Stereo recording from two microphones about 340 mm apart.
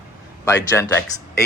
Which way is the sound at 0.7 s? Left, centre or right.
Centre.